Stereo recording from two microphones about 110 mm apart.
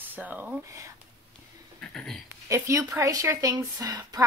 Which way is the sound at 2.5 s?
25° right (ahead or behind).